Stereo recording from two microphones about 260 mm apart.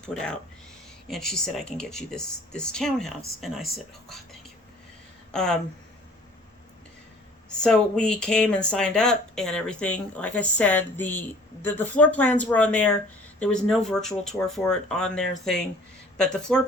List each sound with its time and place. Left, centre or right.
0.0 s speech: centre
5.3 s speech: centre
7.6 s speech: centre